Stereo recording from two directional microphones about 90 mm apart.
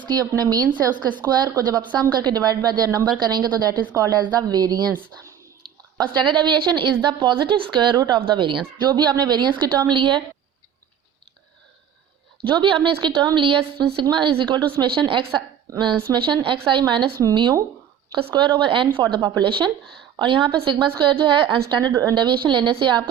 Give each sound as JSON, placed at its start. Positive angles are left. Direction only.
{"t": 0.0, "sound": "speech", "side_deg": -45}
{"t": 6.0, "sound": "speech", "side_deg": -60}
{"t": 12.5, "sound": "speech", "side_deg": -65}
{"t": 16.2, "sound": "speech", "side_deg": -65}
{"t": 18.1, "sound": "a woman's voice", "side_deg": -60}